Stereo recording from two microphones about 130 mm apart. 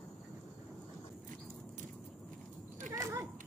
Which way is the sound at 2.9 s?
25° right (ahead or behind).